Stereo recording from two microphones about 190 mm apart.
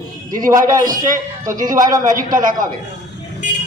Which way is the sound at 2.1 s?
45° right (ahead or behind).